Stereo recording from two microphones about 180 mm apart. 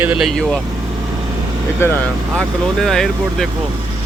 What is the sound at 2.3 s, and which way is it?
Speech, centre (ahead or behind).